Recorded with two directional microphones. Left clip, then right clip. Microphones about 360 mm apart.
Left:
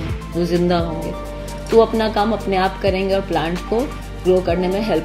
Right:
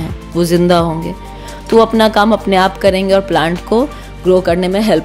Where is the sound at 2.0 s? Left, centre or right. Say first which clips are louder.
Right 8 dB; right.